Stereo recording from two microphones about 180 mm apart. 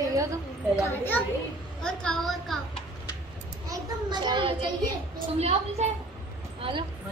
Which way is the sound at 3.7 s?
25° right (ahead or behind).